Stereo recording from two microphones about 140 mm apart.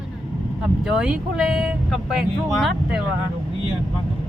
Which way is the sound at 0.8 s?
5° right (ahead or behind).